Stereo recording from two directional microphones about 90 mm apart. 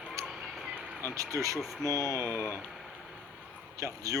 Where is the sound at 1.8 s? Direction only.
35° right (ahead or behind).